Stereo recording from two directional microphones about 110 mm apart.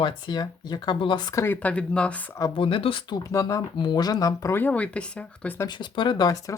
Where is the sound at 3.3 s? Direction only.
30° left (ahead or behind).